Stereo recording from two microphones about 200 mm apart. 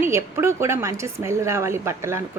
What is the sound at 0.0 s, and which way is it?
A woman's voice, 15° right (ahead or behind).